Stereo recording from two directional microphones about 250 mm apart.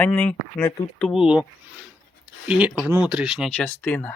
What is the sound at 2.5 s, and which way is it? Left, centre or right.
Speech, centre.